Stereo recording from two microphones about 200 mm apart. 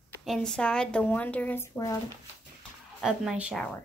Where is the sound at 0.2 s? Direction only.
Centre (ahead or behind).